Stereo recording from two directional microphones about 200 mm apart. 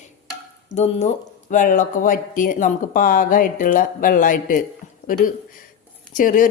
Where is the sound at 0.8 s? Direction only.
35° left (ahead or behind).